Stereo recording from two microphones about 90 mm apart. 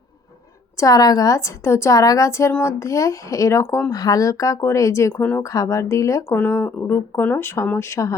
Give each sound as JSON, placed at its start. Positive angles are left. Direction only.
{"t": 0.8, "sound": "a woman's voice", "side_deg": 45}
{"t": 3.8, "sound": "a woman's voice", "side_deg": 45}
{"t": 6.2, "sound": "speech", "side_deg": 20}